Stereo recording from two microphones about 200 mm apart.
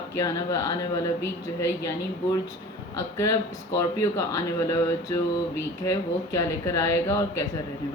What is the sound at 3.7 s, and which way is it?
Speech, 15° left (ahead or behind).